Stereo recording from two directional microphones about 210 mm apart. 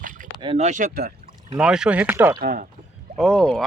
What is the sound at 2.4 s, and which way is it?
Speech, 45° right (ahead or behind).